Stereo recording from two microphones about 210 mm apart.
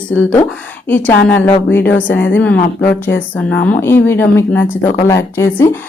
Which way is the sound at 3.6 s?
10° left (ahead or behind).